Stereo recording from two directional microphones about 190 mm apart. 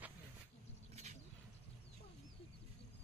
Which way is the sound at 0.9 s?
35° right (ahead or behind).